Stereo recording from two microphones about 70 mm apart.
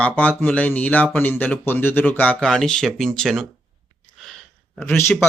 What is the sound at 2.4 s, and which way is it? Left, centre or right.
Speech, centre.